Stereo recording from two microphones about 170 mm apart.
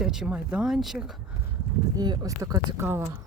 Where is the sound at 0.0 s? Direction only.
5° right (ahead or behind).